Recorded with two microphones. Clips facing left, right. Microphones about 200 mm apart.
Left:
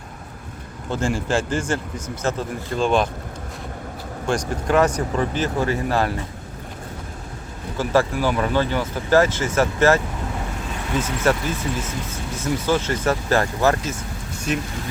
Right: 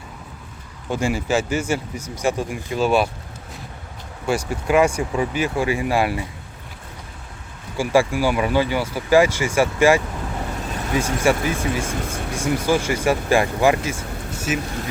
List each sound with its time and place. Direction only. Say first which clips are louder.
0.9 s speech: right 1 dB; 10° right (ahead or behind)
4.3 s speech: right 1 dB; 10° right (ahead or behind)
7.8 s speech: right 2 dB; 10° right (ahead or behind)
11.8 s speech: right 3 dB; 50° right (ahead or behind)
12.3 s speech: right 1 dB; 10° right (ahead or behind)